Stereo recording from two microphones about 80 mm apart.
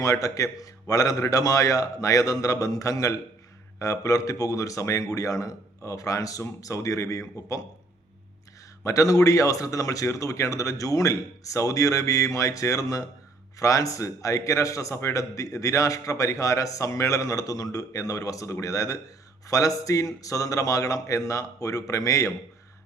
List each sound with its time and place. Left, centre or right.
0.0 s a man's voice: left
8.8 s a man's voice: left